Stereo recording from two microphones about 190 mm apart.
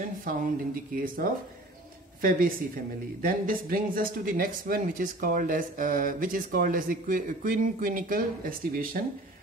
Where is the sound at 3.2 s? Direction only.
50° right (ahead or behind).